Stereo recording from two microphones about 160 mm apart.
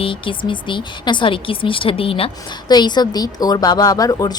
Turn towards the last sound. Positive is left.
turn(degrees=20)  # may be behind; listen again after turning